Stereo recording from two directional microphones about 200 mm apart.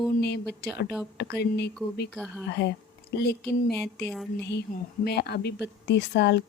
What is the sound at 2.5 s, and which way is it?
Speech, 55° left (ahead or behind).